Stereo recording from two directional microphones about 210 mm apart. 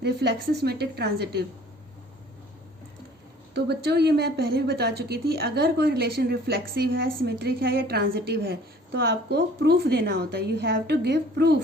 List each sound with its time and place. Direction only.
0.0 s a woman's voice: 50° right (ahead or behind)
3.5 s a woman's voice: 50° right (ahead or behind)